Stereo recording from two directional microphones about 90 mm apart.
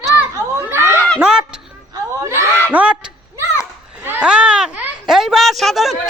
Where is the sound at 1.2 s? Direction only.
10° right (ahead or behind).